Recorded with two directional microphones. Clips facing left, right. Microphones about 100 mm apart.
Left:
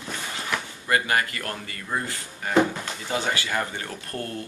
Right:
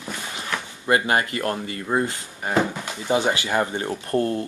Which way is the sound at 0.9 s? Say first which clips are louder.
Right 3 dB; 25° right (ahead or behind).